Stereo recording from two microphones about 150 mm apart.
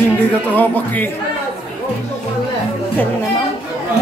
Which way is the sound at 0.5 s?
10° left (ahead or behind).